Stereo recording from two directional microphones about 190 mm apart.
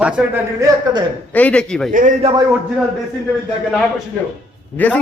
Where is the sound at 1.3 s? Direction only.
10° left (ahead or behind).